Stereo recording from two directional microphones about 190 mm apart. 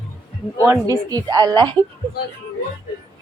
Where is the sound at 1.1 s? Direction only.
20° right (ahead or behind).